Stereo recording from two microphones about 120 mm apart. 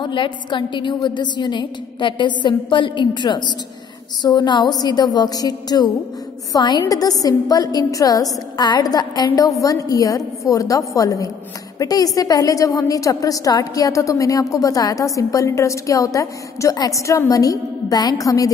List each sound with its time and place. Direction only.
0.0 s a woman's voice: 40° left (ahead or behind)